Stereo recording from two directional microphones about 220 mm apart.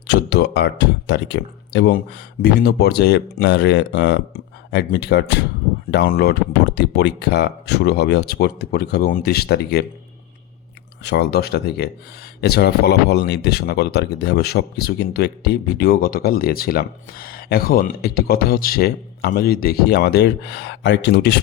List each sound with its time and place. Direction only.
0.1 s speech: 50° left (ahead or behind)
11.0 s speech: 50° left (ahead or behind)